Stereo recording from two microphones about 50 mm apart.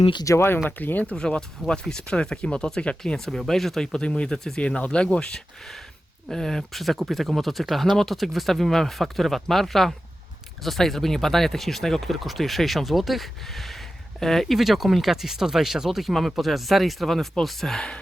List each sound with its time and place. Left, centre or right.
0.3 s speech: left
0.8 s speech: left
1.1 s speech: centre
4.0 s speech: centre
6.3 s speech: centre
14.5 s speech: centre